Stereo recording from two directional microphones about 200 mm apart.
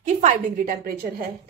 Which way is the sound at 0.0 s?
35° right (ahead or behind).